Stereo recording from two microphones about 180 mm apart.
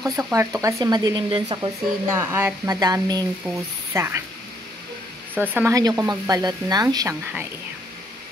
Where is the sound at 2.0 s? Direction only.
15° right (ahead or behind).